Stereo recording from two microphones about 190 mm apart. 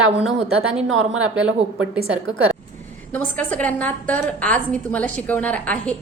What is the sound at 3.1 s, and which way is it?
A woman's voice, 5° left (ahead or behind).